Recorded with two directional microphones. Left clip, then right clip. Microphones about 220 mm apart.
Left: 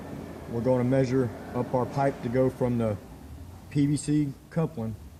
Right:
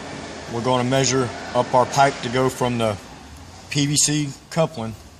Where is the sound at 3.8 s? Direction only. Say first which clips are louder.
Right 5 dB; 25° right (ahead or behind).